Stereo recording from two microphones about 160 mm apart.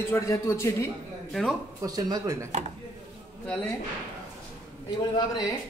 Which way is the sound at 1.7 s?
25° right (ahead or behind).